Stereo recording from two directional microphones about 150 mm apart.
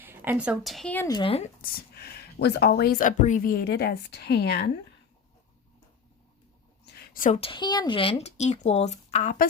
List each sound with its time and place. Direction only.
0.0 s speech: 15° right (ahead or behind)
1.0 s speech: 25° left (ahead or behind)
1.6 s speech: 90° left
6.8 s a sound: 65° left (ahead or behind)
7.3 s speech: 35° left (ahead or behind)